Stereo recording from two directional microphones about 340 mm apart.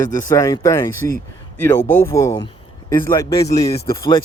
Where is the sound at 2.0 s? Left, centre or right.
Centre.